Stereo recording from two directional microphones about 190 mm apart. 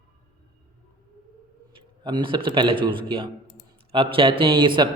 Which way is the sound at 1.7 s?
25° right (ahead or behind).